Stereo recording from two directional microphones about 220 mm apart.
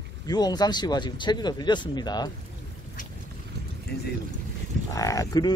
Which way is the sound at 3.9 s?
45° left (ahead or behind).